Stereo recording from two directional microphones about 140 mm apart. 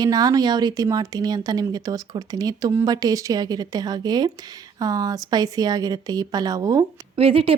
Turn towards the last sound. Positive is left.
turn(degrees=-45)  # may be behind; listen again after turning